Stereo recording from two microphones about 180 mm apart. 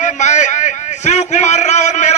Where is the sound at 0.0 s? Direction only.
40° left (ahead or behind).